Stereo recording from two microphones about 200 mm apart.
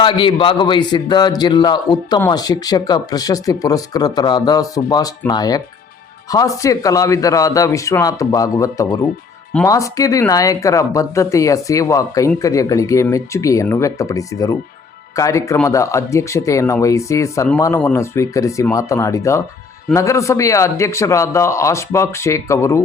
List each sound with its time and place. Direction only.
0.0 s a man's voice: 25° left (ahead or behind)